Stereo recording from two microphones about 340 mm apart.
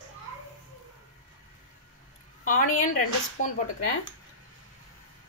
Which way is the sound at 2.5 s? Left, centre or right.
Left.